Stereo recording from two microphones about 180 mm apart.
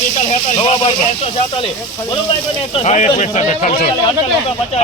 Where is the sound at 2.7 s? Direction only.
40° left (ahead or behind).